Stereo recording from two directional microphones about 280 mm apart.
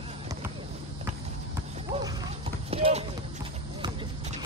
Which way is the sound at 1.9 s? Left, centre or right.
Centre.